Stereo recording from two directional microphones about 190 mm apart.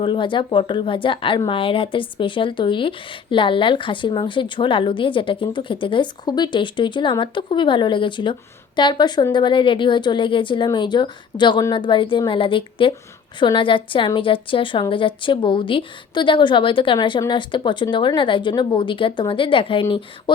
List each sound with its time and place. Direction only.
0.0 s speech: 25° left (ahead or behind)